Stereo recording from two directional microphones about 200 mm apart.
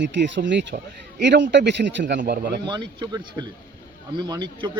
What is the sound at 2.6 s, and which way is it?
A man's voice, 25° right (ahead or behind).